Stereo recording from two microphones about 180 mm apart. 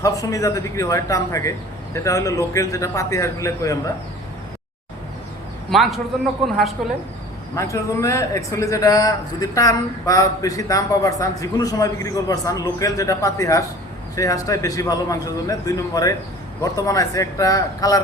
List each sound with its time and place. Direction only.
0.0 s speech: 20° left (ahead or behind)
5.7 s a woman's voice: centre (ahead or behind)
7.5 s a man's voice: 15° left (ahead or behind)